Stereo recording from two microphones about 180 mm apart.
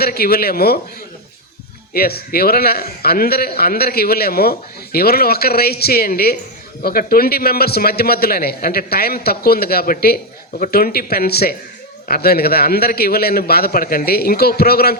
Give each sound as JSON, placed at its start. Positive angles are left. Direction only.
{"t": 0.0, "sound": "a man's voice", "side_deg": 60}
{"t": 1.9, "sound": "a man's voice", "side_deg": 60}